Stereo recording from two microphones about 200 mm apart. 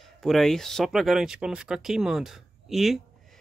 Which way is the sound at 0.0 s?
Centre (ahead or behind).